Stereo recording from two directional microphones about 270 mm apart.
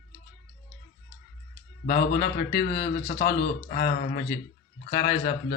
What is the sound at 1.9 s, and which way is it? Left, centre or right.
A man's voice, left.